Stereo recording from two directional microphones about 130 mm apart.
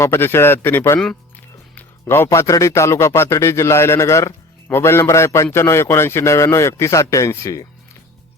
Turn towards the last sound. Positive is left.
turn(degrees=25)  # may be behind; listen again after turning